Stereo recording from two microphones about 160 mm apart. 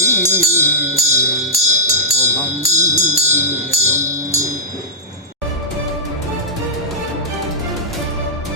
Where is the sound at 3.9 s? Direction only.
20° right (ahead or behind).